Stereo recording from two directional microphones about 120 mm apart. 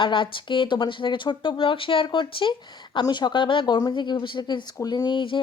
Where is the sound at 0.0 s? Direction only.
45° left (ahead or behind).